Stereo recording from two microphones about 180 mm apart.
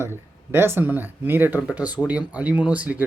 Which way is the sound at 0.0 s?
15° right (ahead or behind).